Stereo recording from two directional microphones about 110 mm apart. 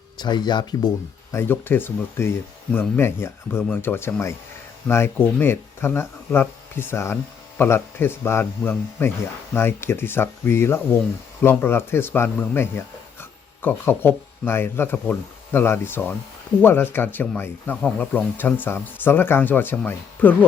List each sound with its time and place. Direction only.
0.2 s speech: 40° left (ahead or behind)
1.3 s speech: 20° left (ahead or behind)